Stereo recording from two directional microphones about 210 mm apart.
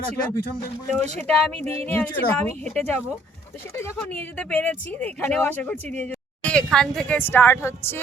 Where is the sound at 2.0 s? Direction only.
10° left (ahead or behind).